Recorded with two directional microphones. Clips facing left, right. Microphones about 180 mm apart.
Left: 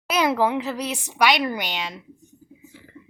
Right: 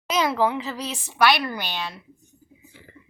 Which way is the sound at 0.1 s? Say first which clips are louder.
Left 1 dB; 10° left (ahead or behind).